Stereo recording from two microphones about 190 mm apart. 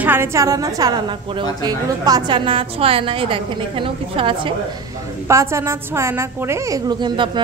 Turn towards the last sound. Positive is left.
turn(degrees=-25)  # may be behind; listen again after turning